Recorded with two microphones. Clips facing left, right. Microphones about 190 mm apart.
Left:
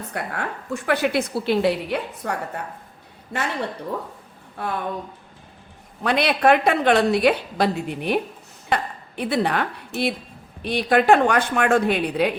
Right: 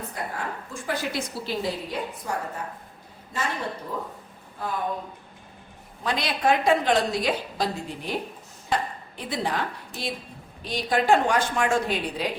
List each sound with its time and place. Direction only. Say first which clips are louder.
0.1 s a woman's voice: left 3 dB; 70° left (ahead or behind)
4.5 s speech: left 3 dB; 70° left (ahead or behind)
6.0 s a woman's voice: left 7 dB; 65° left (ahead or behind)